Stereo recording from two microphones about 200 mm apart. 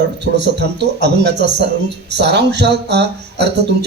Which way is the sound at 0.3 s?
60° right (ahead or behind).